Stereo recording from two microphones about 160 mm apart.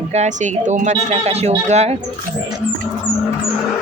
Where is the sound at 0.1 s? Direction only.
45° right (ahead or behind).